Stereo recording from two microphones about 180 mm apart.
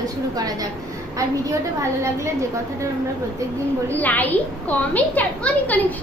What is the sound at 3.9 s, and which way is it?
A woman's voice, 10° left (ahead or behind).